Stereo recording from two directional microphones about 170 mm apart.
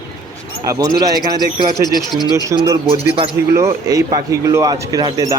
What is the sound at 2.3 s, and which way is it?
A man's voice, 20° right (ahead or behind).